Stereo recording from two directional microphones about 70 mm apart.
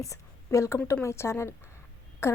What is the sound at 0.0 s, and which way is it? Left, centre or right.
A woman's voice, left.